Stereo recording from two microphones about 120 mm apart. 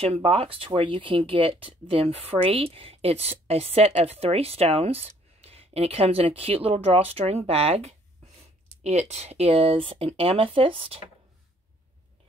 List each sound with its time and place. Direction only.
0.0 s speech: 55° right (ahead or behind)